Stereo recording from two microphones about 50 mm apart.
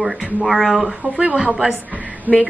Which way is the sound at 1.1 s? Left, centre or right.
Right.